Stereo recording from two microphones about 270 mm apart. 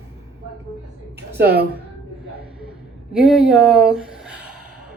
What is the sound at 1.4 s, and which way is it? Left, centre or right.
Speech, right.